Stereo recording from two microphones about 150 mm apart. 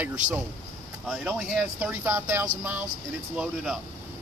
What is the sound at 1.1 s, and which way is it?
Speech, centre (ahead or behind).